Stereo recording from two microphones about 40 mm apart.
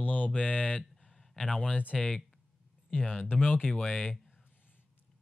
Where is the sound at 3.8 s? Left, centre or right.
Left.